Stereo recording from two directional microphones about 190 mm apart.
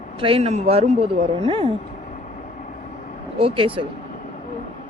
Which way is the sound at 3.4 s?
30° right (ahead or behind).